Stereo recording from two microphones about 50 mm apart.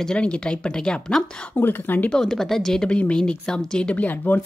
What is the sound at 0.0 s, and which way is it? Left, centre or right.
Speech, centre.